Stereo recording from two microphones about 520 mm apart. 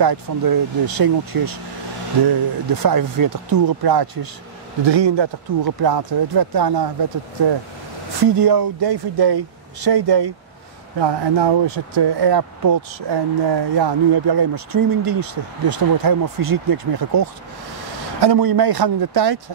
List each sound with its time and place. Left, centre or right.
0.0 s speech: right
8.4 s speech: right